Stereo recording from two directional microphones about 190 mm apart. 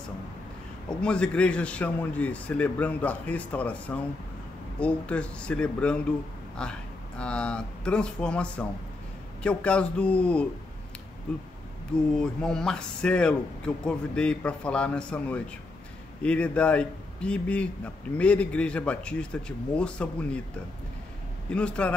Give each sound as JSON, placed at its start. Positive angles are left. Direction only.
{"t": 0.8, "sound": "a man's voice", "side_deg": 5}
{"t": 12.2, "sound": "a man's voice", "side_deg": 5}
{"t": 21.5, "sound": "a man's voice", "side_deg": 5}